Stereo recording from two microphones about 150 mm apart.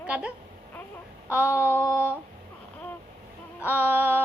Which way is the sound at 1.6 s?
20° left (ahead or behind).